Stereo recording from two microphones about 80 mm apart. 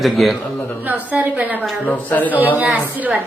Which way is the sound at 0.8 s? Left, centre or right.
Right.